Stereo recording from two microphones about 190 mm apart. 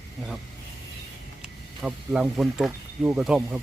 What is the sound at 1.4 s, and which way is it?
Speech, 5° right (ahead or behind).